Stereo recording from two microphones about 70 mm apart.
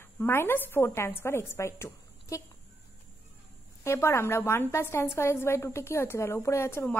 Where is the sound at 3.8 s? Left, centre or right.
Left.